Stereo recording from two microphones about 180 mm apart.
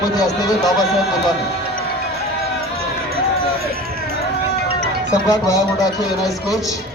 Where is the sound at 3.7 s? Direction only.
55° right (ahead or behind).